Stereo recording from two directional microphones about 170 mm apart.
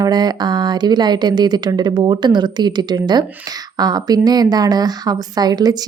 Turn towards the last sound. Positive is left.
turn(degrees=-25)  # may be behind; listen again after turning